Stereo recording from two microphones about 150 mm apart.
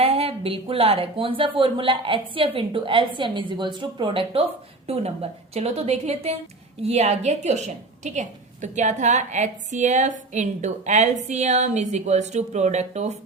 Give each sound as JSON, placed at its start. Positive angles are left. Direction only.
{"t": 0.0, "sound": "a woman's voice", "side_deg": -40}